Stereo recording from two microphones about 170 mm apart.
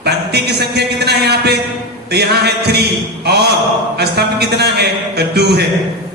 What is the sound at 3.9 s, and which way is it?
A man's voice, 75° right (ahead or behind).